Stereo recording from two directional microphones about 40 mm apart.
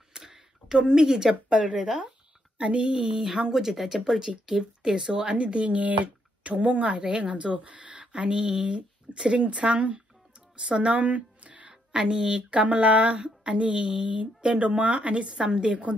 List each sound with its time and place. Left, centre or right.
0.2 s speech: centre
3.2 s speech: centre; by 8.0 s right
8.1 s speech: right